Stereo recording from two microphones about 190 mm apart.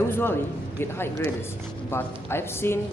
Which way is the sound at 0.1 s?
10° left (ahead or behind).